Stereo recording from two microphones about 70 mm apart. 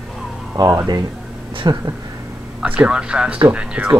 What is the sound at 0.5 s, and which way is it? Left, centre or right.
Speech, right.